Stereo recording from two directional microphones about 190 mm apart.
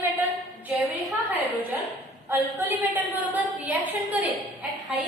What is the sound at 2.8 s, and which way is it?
A woman's voice, 10° right (ahead or behind).